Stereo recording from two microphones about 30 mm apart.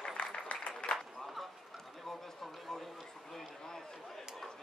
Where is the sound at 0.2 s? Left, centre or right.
Left.